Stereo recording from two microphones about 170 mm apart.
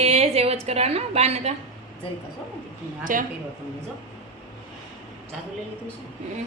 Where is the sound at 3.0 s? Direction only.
55° right (ahead or behind).